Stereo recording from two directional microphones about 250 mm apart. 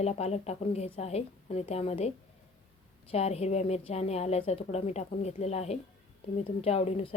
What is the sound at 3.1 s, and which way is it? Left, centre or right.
A woman's voice, left.